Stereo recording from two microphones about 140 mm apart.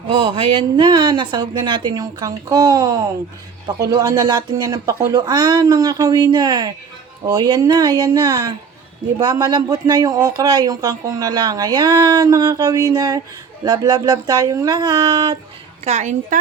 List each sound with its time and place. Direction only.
0.1 s speech: 35° right (ahead or behind)
15.8 s a woman's voice: 55° right (ahead or behind)